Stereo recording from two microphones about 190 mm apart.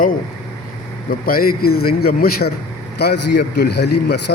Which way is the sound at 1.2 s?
50° left (ahead or behind).